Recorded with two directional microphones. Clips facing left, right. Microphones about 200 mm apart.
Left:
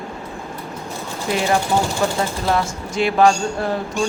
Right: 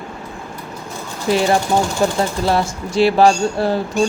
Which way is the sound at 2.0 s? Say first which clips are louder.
Right 3 dB; 35° right (ahead or behind).